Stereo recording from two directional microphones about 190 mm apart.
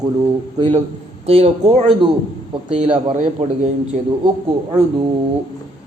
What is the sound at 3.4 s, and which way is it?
Speech, 35° right (ahead or behind).